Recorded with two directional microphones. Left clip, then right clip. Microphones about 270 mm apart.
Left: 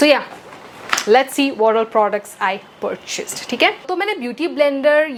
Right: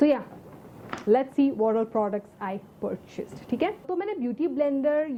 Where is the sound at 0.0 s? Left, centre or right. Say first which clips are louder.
Left 10 dB; centre.